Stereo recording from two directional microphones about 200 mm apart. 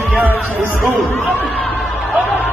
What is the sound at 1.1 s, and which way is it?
Speech, 10° left (ahead or behind).